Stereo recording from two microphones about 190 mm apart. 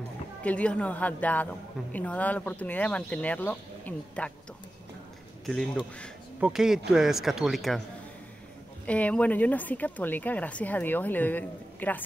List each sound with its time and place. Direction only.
0.4 s a woman's voice: 5° left (ahead or behind)
5.4 s a man's voice: centre (ahead or behind)
8.8 s a woman's voice: 5° left (ahead or behind)